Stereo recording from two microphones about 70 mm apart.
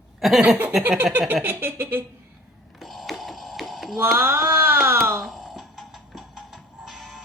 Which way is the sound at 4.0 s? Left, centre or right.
Right.